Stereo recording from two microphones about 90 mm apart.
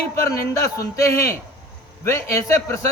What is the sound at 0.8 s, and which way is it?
A man's voice, 35° left (ahead or behind).